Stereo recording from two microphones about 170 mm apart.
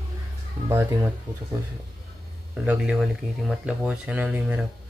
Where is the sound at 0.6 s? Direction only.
15° right (ahead or behind).